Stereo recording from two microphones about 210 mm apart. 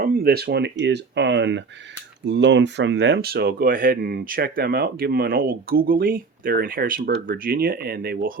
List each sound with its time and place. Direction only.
0.0 s speech: 45° right (ahead or behind)